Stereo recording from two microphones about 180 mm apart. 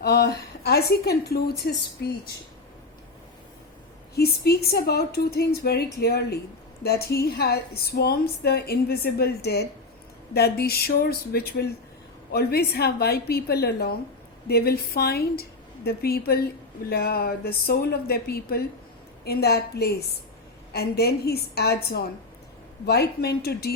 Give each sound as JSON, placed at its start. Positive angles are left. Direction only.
{"t": 0.0, "sound": "a woman's voice", "side_deg": 65}
{"t": 4.1, "sound": "speech", "side_deg": 60}